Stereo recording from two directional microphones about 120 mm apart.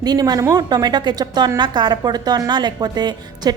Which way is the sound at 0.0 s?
35° right (ahead or behind).